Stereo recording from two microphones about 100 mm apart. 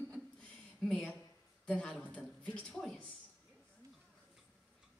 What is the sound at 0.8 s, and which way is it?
A woman's voice, 5° left (ahead or behind).